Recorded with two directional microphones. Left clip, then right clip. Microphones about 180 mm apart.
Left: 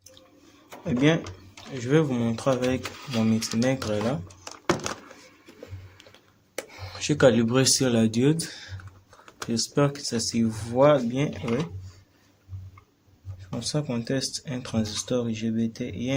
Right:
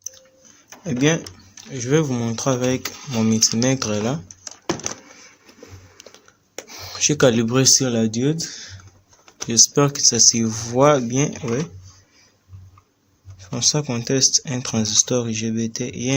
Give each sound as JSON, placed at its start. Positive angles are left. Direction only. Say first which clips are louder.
{"t": 0.9, "sound": "speech", "louder": "right 3 dB", "side_deg": -45}
{"t": 1.7, "sound": "speech", "louder": "right 3 dB", "side_deg": -35}
{"t": 6.7, "sound": "speech", "louder": "right 9 dB", "side_deg": -45}
{"t": 9.5, "sound": "speech", "louder": "right 8 dB", "side_deg": -50}
{"t": 13.4, "sound": "speech", "louder": "right 10 dB", "side_deg": -55}